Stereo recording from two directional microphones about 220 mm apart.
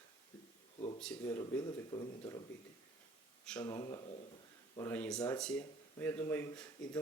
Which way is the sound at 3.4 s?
5° left (ahead or behind).